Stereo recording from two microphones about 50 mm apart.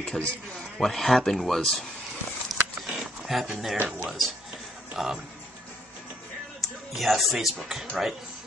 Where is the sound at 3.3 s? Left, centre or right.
Centre.